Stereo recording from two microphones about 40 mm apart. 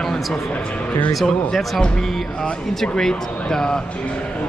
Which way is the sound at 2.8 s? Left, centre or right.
Centre.